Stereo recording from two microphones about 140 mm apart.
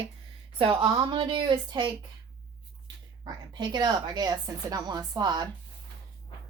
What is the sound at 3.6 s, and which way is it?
A woman's voice, 30° right (ahead or behind).